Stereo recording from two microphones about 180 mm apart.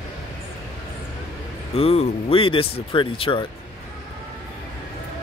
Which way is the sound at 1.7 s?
35° left (ahead or behind).